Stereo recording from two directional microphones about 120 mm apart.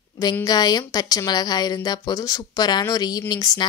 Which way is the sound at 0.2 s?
30° left (ahead or behind).